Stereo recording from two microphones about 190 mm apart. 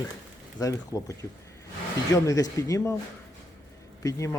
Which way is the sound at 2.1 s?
15° left (ahead or behind).